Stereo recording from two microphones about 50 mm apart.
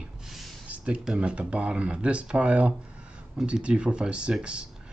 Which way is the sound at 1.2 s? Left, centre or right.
Right.